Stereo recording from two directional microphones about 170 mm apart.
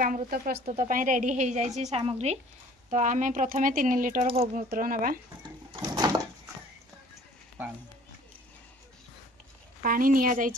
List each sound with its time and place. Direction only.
0.0 s speech: 55° right (ahead or behind)
0.7 s a woman's voice: 50° right (ahead or behind)
5.4 s a sound: 25° right (ahead or behind)
9.8 s speech: 55° right (ahead or behind)